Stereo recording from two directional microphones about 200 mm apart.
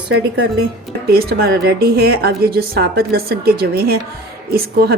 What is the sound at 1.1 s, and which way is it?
A woman's voice, 50° right (ahead or behind).